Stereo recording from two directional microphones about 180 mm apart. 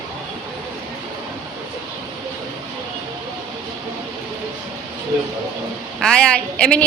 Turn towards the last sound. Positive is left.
turn(degrees=5)  # may be behind; listen again after turning